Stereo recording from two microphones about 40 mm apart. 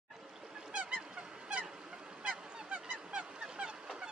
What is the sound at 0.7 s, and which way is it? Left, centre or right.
Honk, right.